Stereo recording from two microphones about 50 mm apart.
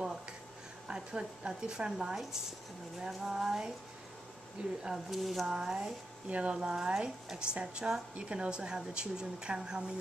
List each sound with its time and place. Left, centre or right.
0.8 s speech: centre
4.8 s speech: centre
5.5 s speech: centre
6.2 s a woman's voice: right